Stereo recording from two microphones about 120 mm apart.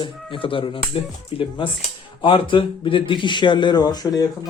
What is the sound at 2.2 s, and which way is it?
Speech, 45° left (ahead or behind).